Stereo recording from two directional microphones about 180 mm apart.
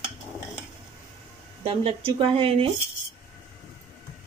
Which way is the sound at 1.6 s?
30° right (ahead or behind).